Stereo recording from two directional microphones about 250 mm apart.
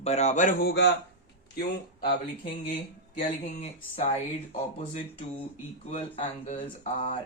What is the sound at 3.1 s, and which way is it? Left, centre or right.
Speech, left.